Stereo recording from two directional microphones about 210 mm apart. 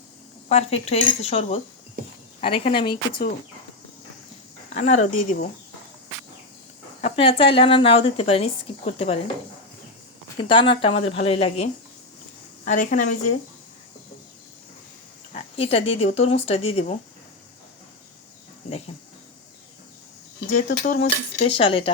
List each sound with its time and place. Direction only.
0.4 s speech: 30° left (ahead or behind)
2.7 s speech: 20° left (ahead or behind)
4.7 s speech: 35° left (ahead or behind)
7.0 s speech: 25° left (ahead or behind)
10.3 s speech: 25° left (ahead or behind)
15.5 s speech: 30° left (ahead or behind)
20.5 s speech: 35° left (ahead or behind)